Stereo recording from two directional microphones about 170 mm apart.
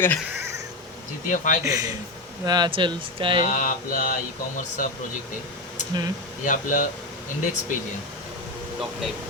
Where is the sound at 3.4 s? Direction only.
50° left (ahead or behind).